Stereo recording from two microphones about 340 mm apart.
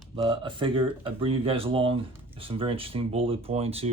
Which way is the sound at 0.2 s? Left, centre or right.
Centre.